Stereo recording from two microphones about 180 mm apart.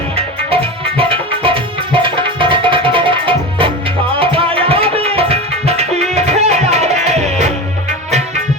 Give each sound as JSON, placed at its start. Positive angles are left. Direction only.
{"t": 0.2, "sound": "tabla", "side_deg": -30}
{"t": 6.0, "sound": "music", "side_deg": -35}